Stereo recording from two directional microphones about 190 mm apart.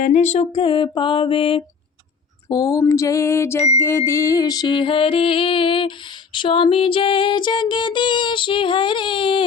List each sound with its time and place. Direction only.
0.0 s music: 35° left (ahead or behind)
2.5 s a sound: 20° left (ahead or behind)
3.8 s music: 15° left (ahead or behind)